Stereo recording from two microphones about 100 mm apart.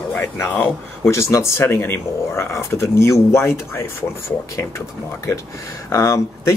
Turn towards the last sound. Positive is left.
turn(degrees=30)  # may be behind; listen again after turning